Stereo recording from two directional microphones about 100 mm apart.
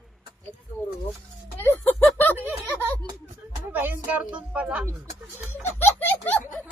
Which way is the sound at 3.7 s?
20° right (ahead or behind).